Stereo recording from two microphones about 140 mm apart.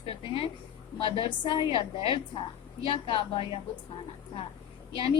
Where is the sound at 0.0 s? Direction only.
40° left (ahead or behind).